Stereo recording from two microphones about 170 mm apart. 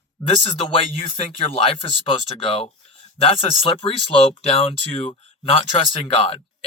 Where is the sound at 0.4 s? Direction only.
35° left (ahead or behind).